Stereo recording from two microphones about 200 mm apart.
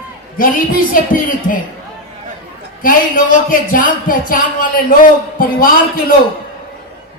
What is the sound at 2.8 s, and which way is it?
Speech, 45° left (ahead or behind).